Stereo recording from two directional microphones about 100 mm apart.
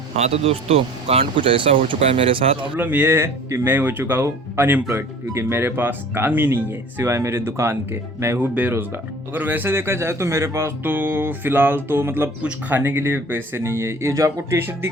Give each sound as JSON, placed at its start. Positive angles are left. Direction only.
{"t": 0.2, "sound": "speech", "side_deg": -90}
{"t": 2.7, "sound": "speech", "side_deg": -15}